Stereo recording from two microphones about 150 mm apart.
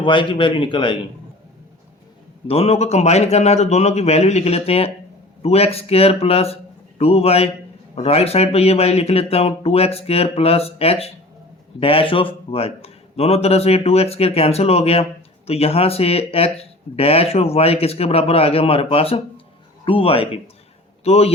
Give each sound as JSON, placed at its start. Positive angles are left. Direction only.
{"t": 0.0, "sound": "speech", "side_deg": 35}
{"t": 2.5, "sound": "speech", "side_deg": 45}